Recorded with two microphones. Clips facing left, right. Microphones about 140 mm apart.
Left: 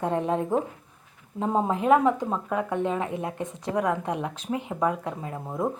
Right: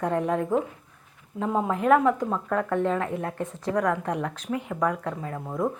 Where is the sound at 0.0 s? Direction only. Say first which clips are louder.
Even; 25° left (ahead or behind).